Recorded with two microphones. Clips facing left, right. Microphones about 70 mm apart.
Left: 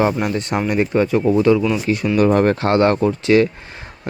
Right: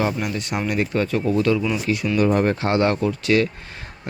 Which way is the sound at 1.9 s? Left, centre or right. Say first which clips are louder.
Left 3 dB; left.